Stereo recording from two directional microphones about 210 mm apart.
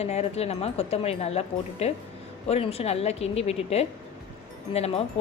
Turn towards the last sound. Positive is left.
turn(degrees=30)  # may be behind; listen again after turning